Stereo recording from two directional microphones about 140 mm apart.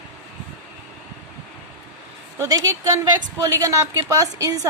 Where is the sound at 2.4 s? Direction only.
25° right (ahead or behind).